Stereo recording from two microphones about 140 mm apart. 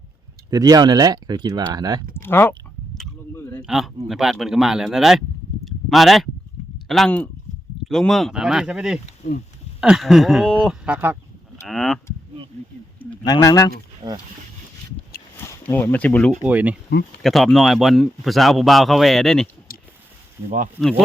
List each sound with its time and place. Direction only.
0.5 s speech: 25° right (ahead or behind)
2.1 s speech: 15° left (ahead or behind)
3.6 s speech: centre (ahead or behind)
5.6 s a sound: centre (ahead or behind)
6.8 s speech: centre (ahead or behind)
10.8 s speech: 15° right (ahead or behind)
11.6 s speech: 5° left (ahead or behind)
13.2 s speech: 25° left (ahead or behind)
14.0 s speech: 30° right (ahead or behind)
15.4 s speech: 15° left (ahead or behind)
16.4 s speech: 10° right (ahead or behind)
17.2 s speech: centre (ahead or behind)
19.7 s a sound: 90° left